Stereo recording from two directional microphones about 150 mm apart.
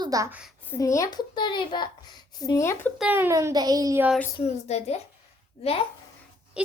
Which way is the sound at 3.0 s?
15° right (ahead or behind).